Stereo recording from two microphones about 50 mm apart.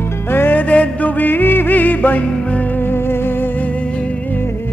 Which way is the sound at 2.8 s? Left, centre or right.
Left.